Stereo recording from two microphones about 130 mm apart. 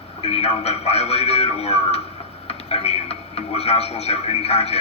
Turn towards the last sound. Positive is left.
turn(degrees=50)  # may be behind; listen again after turning